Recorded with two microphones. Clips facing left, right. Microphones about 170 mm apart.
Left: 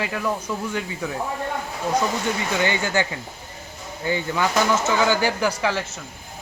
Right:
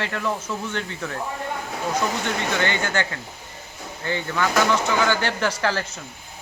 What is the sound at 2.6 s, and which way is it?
Speech, 15° left (ahead or behind).